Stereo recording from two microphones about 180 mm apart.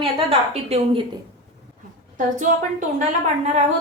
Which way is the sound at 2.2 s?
45° right (ahead or behind).